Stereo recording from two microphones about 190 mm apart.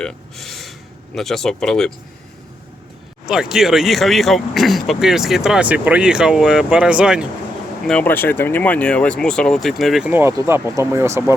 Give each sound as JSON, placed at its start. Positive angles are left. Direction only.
{"t": 0.0, "sound": "a sound", "side_deg": 0}
{"t": 1.1, "sound": "speech", "side_deg": 0}
{"t": 3.2, "sound": "speech", "side_deg": -5}
{"t": 7.9, "sound": "speech", "side_deg": 10}